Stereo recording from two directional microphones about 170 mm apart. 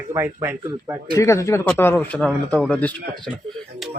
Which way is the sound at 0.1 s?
20° right (ahead or behind).